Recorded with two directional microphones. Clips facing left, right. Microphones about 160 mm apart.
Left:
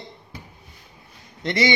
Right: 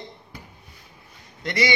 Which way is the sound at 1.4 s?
25° left (ahead or behind).